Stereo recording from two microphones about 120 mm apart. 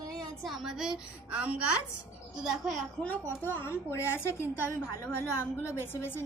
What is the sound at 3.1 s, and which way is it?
A woman's voice, 15° left (ahead or behind).